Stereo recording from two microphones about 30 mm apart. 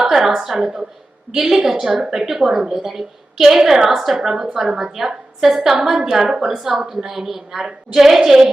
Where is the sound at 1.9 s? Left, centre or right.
Right.